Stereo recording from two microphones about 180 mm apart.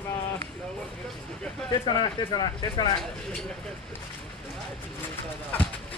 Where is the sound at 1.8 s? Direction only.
25° left (ahead or behind).